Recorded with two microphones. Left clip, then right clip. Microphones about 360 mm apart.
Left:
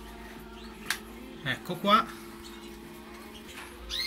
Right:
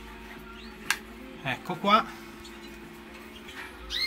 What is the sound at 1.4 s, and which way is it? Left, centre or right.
Speech, centre.